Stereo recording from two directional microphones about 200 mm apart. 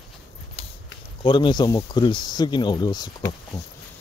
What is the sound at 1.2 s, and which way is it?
Speech, 25° left (ahead or behind).